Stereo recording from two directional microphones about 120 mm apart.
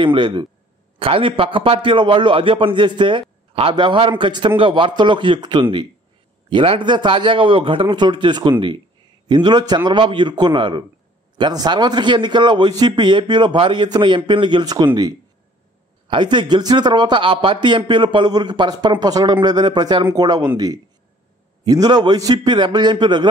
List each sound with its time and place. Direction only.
0.0 s a man's voice: 40° right (ahead or behind)
16.1 s speech: 40° right (ahead or behind)